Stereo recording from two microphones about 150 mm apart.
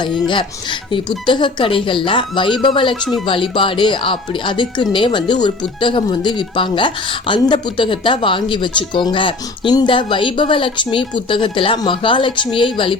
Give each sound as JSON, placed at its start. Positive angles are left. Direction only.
{"t": 0.9, "sound": "speech", "side_deg": 35}